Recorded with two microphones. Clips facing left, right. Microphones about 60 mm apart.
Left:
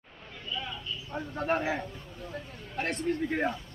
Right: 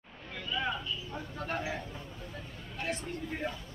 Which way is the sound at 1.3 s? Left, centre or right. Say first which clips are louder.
Left 9 dB; left.